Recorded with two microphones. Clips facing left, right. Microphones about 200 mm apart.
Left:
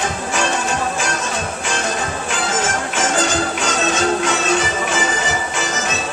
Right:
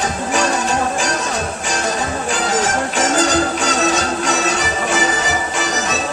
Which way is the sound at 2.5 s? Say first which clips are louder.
Right 3 dB; 40° right (ahead or behind).